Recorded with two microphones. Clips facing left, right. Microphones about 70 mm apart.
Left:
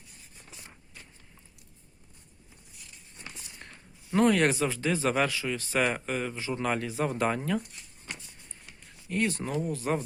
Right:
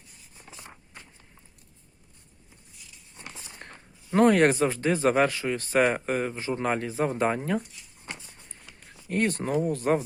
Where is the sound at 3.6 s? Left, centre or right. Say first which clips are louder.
Right 4 dB; right.